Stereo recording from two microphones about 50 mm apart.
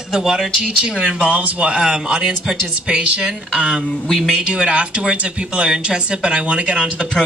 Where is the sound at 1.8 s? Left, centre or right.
Centre.